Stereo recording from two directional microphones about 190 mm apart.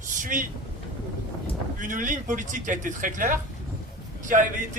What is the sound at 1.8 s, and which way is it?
A man's voice, 45° right (ahead or behind).